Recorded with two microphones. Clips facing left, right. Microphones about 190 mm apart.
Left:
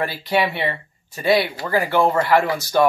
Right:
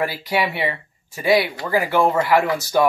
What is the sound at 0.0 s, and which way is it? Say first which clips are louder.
Speech: left 1 dB; 10° right (ahead or behind).